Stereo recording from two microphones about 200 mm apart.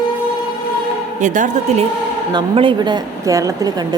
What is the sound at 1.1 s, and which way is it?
Speech, 40° right (ahead or behind).